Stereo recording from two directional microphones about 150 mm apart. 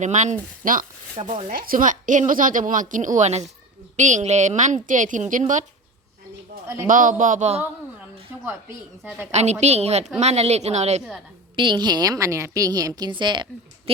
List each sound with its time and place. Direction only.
0.0 s a woman's voice: 50° right (ahead or behind)
1.1 s speech: 40° right (ahead or behind)
1.5 s a woman's voice: 70° right (ahead or behind)
6.8 s a woman's voice: 60° right (ahead or behind)
9.0 s a woman's voice: 5° right (ahead or behind)
9.3 s a woman's voice: 50° right (ahead or behind)
11.5 s a woman's voice: 30° right (ahead or behind)